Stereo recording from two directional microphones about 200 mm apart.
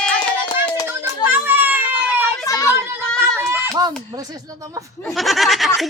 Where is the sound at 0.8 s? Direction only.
10° right (ahead or behind).